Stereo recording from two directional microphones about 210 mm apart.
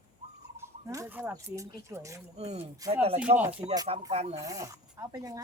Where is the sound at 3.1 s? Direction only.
5° right (ahead or behind).